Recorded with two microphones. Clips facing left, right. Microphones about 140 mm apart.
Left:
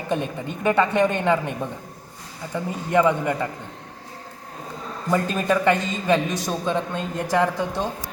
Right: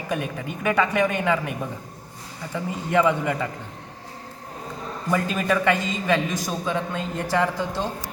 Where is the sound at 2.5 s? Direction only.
15° left (ahead or behind).